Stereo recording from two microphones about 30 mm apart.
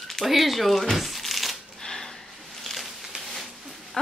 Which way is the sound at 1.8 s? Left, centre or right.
Centre.